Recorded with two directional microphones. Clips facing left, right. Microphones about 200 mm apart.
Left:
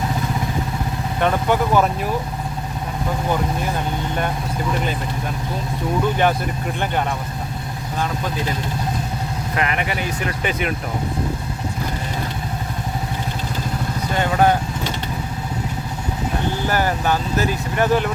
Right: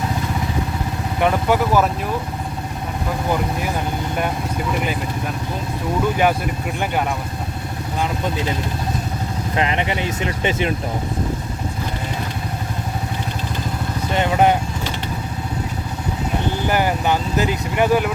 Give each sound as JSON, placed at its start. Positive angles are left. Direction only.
{"t": 1.2, "sound": "speech", "side_deg": -10}
{"t": 9.6, "sound": "speech", "side_deg": -25}
{"t": 14.1, "sound": "vehicle", "side_deg": -20}
{"t": 16.6, "sound": "speech", "side_deg": -15}